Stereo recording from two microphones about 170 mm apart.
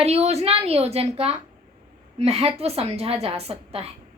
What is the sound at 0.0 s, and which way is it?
A woman's voice, 35° right (ahead or behind).